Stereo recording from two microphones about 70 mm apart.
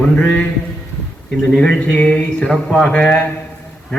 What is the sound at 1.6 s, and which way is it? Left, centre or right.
A man's voice, centre.